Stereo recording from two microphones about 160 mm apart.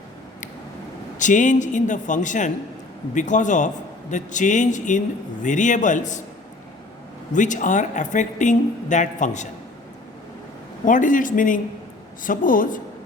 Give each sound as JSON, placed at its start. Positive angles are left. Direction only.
{"t": 1.2, "sound": "speech", "side_deg": 50}
{"t": 7.3, "sound": "speech", "side_deg": 50}
{"t": 10.8, "sound": "speech", "side_deg": 55}